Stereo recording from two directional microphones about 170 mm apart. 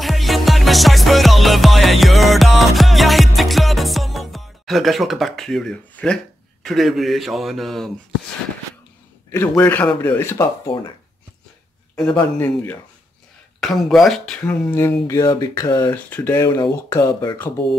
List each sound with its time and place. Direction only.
0.0 s music: centre (ahead or behind)
6.6 s speech: centre (ahead or behind)
9.3 s speech: 10° left (ahead or behind)
12.2 s speech: 10° left (ahead or behind)
13.6 s speech: centre (ahead or behind); by 17.4 s 20° left (ahead or behind)